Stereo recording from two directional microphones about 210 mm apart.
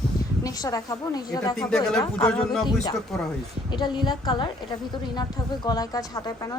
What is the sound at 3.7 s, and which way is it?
A woman's voice, 20° left (ahead or behind).